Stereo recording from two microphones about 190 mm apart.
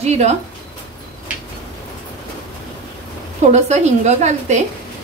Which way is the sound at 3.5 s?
35° right (ahead or behind).